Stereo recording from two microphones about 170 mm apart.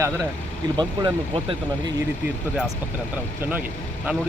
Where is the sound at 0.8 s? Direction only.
30° right (ahead or behind).